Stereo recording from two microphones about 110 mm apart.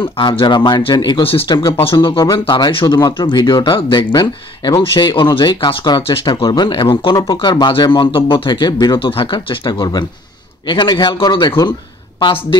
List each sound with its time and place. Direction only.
0.2 s speech: 45° left (ahead or behind)
7.2 s speech: 35° left (ahead or behind)